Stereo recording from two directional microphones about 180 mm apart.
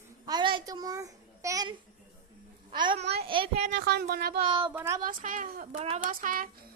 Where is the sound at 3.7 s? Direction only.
75° right (ahead or behind).